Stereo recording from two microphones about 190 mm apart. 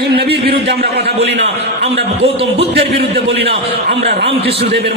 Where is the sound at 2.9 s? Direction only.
55° right (ahead or behind).